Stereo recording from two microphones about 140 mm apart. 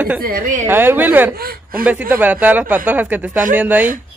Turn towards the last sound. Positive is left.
turn(degrees=-10)  # may be behind; listen again after turning